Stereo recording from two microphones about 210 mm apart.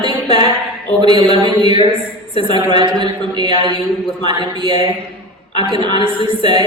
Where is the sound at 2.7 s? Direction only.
20° right (ahead or behind).